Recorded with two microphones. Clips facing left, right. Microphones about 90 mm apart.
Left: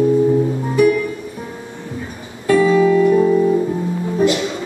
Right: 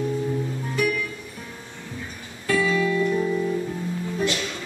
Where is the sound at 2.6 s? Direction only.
35° left (ahead or behind).